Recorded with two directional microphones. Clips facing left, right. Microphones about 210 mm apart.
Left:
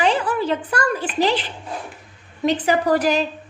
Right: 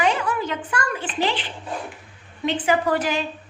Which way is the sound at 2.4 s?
40° left (ahead or behind).